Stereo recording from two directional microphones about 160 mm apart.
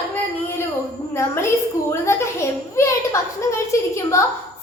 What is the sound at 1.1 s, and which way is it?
A child's voice, 15° left (ahead or behind).